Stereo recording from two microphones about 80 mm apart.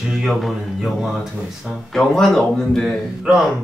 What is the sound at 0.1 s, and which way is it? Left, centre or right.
Speech, centre.